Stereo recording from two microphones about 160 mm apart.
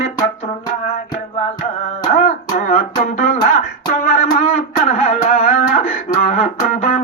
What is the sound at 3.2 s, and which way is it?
Music, 45° left (ahead or behind).